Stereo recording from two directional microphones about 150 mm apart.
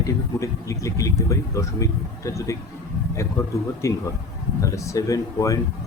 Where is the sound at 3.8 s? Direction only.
20° left (ahead or behind).